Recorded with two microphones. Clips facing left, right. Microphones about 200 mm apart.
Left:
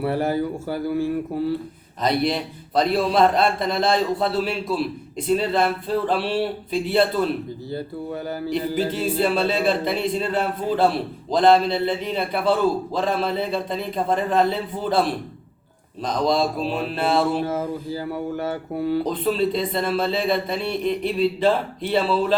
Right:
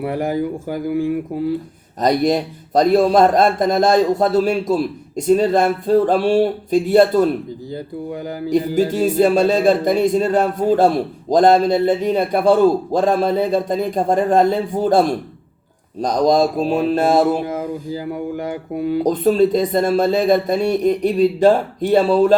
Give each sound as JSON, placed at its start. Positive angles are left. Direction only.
{"t": 0.0, "sound": "speech", "side_deg": -15}
{"t": 2.0, "sound": "speech", "side_deg": -45}
{"t": 8.4, "sound": "speech", "side_deg": -45}
{"t": 17.4, "sound": "speech", "side_deg": -15}
{"t": 19.0, "sound": "speech", "side_deg": -45}